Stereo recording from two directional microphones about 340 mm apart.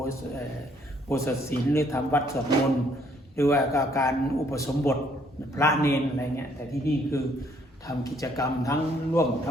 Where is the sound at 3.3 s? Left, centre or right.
Centre.